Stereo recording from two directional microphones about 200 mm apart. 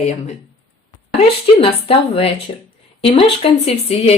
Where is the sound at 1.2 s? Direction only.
30° left (ahead or behind).